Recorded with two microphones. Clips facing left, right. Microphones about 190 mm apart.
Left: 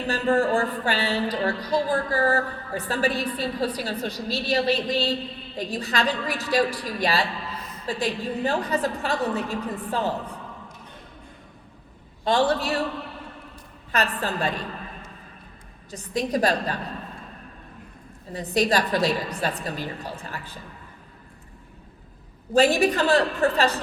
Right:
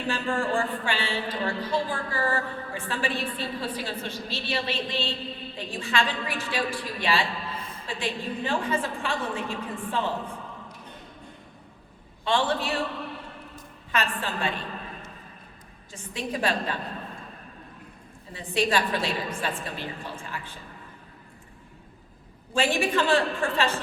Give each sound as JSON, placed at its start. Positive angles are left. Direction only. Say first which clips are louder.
{"t": 0.1, "sound": "a woman's voice", "louder": "left 6 dB", "side_deg": 40}
{"t": 7.5, "sound": "a sound", "louder": "even", "side_deg": -30}
{"t": 7.9, "sound": "a woman's voice", "louder": "left 5 dB", "side_deg": 40}
{"t": 12.2, "sound": "a woman's voice", "louder": "left 4 dB", "side_deg": 40}
{"t": 13.9, "sound": "a woman's voice", "louder": "left 3 dB", "side_deg": 40}
{"t": 15.9, "sound": "a woman's voice", "louder": "left 7 dB", "side_deg": 40}
{"t": 18.3, "sound": "a woman's voice", "louder": "left 3 dB", "side_deg": 40}
{"t": 22.5, "sound": "a woman's voice", "louder": "left 5 dB", "side_deg": 40}